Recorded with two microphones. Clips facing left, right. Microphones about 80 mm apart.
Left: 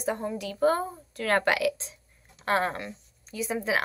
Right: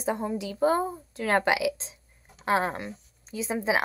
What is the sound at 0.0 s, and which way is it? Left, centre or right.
A woman's voice, centre.